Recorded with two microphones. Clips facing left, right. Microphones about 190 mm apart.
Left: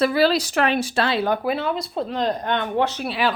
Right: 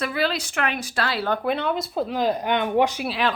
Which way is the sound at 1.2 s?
5° left (ahead or behind).